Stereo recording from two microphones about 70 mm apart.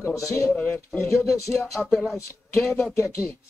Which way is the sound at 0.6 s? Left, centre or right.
Left.